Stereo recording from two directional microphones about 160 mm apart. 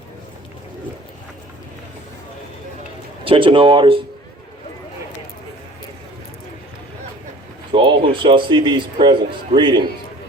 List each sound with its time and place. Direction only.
3.2 s speech: 35° right (ahead or behind)
7.7 s speech: 30° right (ahead or behind)